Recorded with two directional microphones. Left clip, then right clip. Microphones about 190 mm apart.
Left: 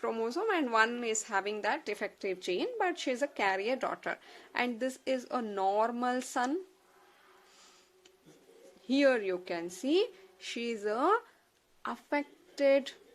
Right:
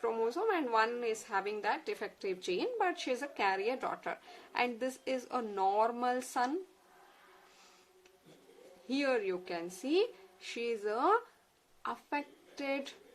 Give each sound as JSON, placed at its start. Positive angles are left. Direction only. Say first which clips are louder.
{"t": 0.0, "sound": "a woman's voice", "louder": "even", "side_deg": 35}
{"t": 8.9, "sound": "a woman's voice", "louder": "left 5 dB", "side_deg": 30}